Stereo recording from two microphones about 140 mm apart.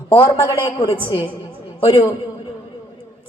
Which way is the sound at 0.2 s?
30° left (ahead or behind).